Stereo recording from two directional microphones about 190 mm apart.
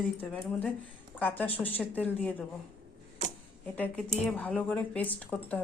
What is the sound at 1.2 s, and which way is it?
Speech, 10° left (ahead or behind).